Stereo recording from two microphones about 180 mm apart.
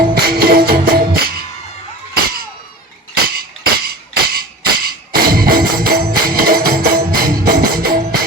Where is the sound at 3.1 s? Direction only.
55° right (ahead or behind).